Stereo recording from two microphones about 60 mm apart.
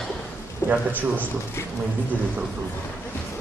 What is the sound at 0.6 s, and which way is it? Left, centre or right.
Speech, left.